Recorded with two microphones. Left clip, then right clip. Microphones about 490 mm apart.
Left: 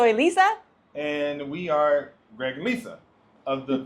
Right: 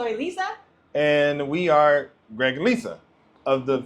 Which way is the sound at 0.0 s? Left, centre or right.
Left.